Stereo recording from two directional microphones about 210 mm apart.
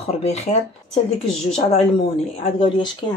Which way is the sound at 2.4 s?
25° left (ahead or behind).